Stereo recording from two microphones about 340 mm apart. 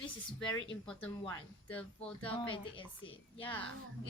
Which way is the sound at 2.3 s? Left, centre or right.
Centre.